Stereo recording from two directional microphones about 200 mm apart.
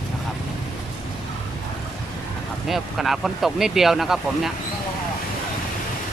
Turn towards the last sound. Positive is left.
turn(degrees=0)  # may be behind; listen again after turning